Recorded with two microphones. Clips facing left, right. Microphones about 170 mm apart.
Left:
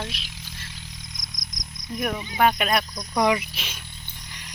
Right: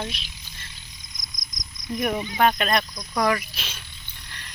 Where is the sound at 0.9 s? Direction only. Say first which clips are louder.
Left 6 dB; 75° left (ahead or behind).